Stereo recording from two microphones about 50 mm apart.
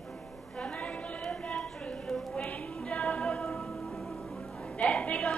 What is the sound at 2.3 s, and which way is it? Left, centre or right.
Music, left.